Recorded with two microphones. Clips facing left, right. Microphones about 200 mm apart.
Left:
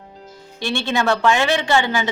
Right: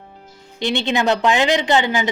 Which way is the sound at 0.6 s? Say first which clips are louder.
Right 2 dB; 20° right (ahead or behind).